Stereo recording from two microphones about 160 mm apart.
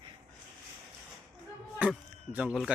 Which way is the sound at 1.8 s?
10° right (ahead or behind).